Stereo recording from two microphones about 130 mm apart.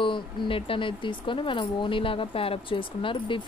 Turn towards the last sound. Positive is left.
turn(degrees=40)  # may be behind; listen again after turning